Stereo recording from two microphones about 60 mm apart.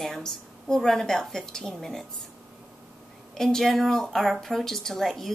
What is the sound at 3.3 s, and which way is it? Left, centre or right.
A woman's voice, centre.